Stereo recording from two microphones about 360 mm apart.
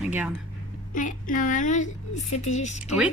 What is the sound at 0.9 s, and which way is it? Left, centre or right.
Speech, left.